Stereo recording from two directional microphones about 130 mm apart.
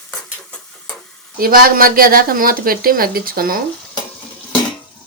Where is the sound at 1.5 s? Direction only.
90° right.